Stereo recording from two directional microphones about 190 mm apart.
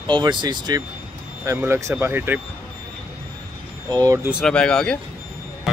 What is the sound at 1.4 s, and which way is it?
Speech, 15° right (ahead or behind).